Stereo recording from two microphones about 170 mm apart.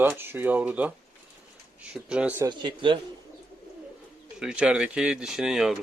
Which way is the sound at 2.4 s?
25° right (ahead or behind).